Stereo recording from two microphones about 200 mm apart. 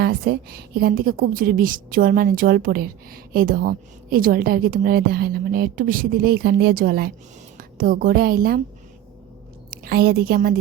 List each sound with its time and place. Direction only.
0.0 s a woman's voice: 50° right (ahead or behind)
9.6 s a woman's voice: 50° right (ahead or behind)